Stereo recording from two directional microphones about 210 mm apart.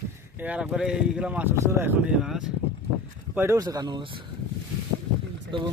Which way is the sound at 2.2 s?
Centre (ahead or behind).